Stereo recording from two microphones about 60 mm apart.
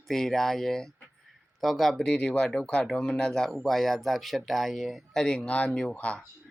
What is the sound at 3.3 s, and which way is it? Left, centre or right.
Speech, centre.